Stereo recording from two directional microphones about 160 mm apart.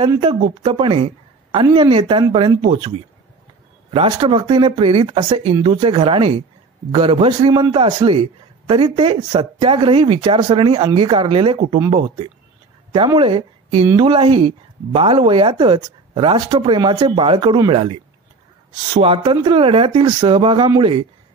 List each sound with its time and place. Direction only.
0.2 s a man's voice: 35° right (ahead or behind)
3.9 s a man's voice: 35° right (ahead or behind)
12.9 s a man's voice: 30° right (ahead or behind)